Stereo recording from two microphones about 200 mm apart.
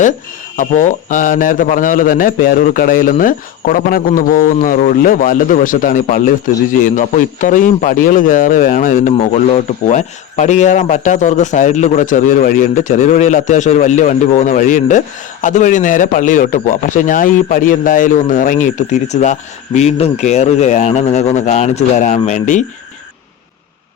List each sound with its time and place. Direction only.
0.5 s a man's voice: 40° left (ahead or behind)